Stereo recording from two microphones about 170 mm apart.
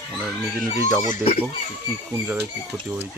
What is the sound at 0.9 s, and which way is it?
Speech, 20° right (ahead or behind).